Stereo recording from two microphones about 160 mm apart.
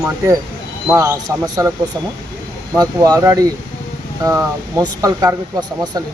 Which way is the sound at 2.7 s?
25° right (ahead or behind).